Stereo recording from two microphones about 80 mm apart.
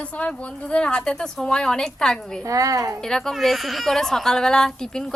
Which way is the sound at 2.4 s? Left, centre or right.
Right.